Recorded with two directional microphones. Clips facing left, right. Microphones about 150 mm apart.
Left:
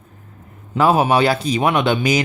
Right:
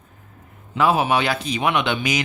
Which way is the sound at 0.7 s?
40° left (ahead or behind).